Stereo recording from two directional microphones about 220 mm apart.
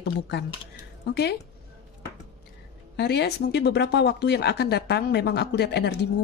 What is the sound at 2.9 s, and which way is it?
Speech, 50° left (ahead or behind).